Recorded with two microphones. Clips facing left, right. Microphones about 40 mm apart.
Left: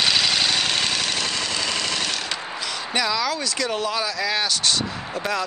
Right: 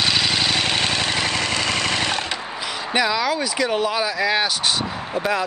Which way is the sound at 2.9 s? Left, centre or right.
Centre.